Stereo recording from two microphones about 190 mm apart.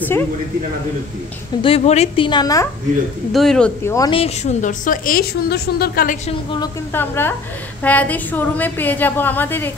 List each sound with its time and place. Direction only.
1.6 s a woman's voice: 30° left (ahead or behind)
3.3 s speech: 5° left (ahead or behind)
3.9 s a woman's voice: 20° left (ahead or behind)
4.2 s a woman's voice: 35° left (ahead or behind); by 6.1 s 55° left (ahead or behind)
6.2 s a woman's voice: 25° left (ahead or behind)
6.9 s a woman's voice: 10° left (ahead or behind)